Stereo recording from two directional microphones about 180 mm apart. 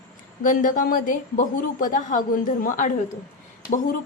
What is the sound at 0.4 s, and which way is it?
A woman's voice, 45° left (ahead or behind).